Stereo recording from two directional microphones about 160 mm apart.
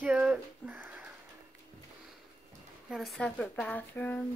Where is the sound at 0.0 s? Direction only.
10° right (ahead or behind).